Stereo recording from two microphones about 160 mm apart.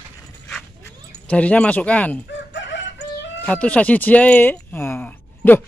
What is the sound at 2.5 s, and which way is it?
Fowl, 90° left.